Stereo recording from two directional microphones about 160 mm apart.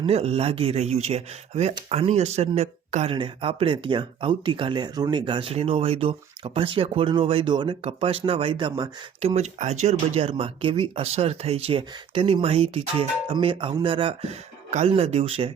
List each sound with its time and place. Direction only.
0.0 s speech: 40° right (ahead or behind)
9.2 s speech: 45° right (ahead or behind)